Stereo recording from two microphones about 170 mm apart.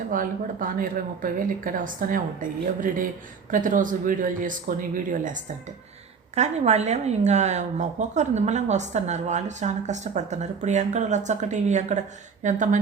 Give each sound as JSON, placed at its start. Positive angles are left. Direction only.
{"t": 0.1, "sound": "a woman's voice", "side_deg": -55}
{"t": 6.3, "sound": "a woman's voice", "side_deg": -40}